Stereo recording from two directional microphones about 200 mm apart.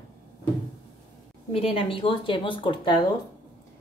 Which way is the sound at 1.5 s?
30° left (ahead or behind).